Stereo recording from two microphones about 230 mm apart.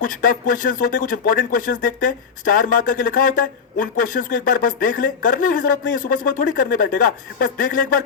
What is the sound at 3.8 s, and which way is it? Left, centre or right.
A woman's voice, left.